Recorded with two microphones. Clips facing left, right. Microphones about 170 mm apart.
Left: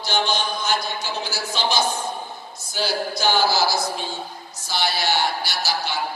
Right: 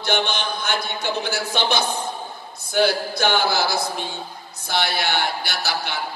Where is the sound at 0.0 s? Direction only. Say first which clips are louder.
Right 1 dB; 60° right (ahead or behind).